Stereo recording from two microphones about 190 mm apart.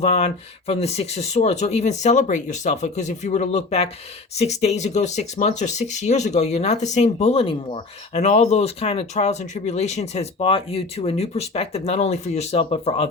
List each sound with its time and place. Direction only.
0.0 s speech: 35° left (ahead or behind)